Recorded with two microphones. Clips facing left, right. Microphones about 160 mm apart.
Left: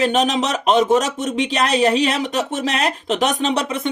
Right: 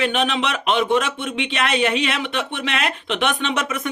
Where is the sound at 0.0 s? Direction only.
40° left (ahead or behind).